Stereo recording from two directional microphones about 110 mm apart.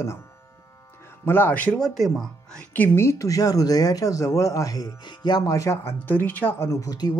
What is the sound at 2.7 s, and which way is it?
Speech, 20° left (ahead or behind).